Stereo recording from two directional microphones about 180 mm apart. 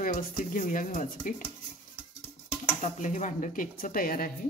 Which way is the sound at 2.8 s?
45° left (ahead or behind).